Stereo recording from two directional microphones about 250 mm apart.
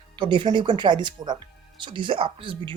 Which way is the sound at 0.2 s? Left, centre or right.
Centre.